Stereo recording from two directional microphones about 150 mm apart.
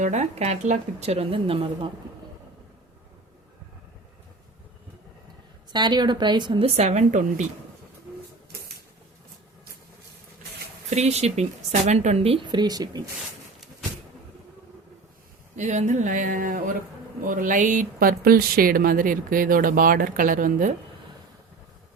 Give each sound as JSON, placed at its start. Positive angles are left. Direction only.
{"t": 0.0, "sound": "speech", "side_deg": -50}
{"t": 5.7, "sound": "speech", "side_deg": -30}
{"t": 10.8, "sound": "speech", "side_deg": -45}
{"t": 15.5, "sound": "speech", "side_deg": -50}